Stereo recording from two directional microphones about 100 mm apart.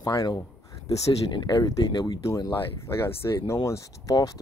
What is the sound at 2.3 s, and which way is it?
Speech, 35° left (ahead or behind).